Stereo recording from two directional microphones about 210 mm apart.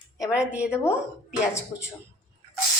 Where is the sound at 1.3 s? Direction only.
15° left (ahead or behind).